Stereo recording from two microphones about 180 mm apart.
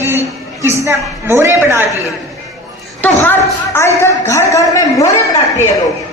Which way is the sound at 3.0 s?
10° left (ahead or behind).